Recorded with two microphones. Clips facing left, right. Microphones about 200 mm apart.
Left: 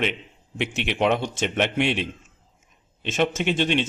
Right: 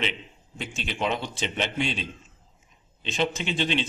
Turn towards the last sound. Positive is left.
turn(degrees=50)  # may be behind; listen again after turning